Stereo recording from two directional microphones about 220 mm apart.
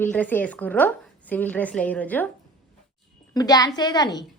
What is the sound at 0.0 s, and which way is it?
A woman's voice, 5° left (ahead or behind).